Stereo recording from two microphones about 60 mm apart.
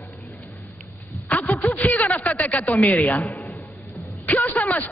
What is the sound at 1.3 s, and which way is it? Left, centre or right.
Speech, left.